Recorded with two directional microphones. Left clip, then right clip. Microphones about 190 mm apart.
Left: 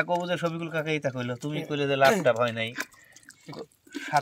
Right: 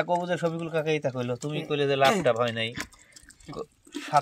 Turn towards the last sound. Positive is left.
turn(degrees=-25)  # may be behind; listen again after turning